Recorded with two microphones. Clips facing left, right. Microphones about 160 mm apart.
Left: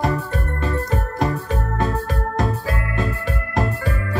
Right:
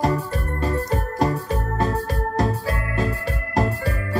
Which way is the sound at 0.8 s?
40° right (ahead or behind).